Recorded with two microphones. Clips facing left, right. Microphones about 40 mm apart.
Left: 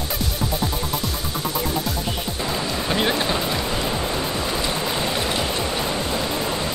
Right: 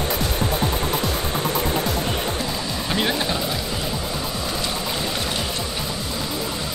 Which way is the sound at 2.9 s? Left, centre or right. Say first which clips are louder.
Left 1 dB; centre.